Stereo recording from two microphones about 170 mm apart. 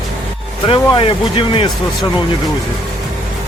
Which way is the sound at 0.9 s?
30° left (ahead or behind).